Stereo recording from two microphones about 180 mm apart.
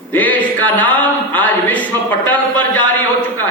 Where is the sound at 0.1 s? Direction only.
10° left (ahead or behind).